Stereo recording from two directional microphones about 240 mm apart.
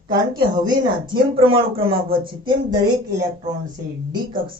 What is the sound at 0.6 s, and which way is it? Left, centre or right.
Speech, centre.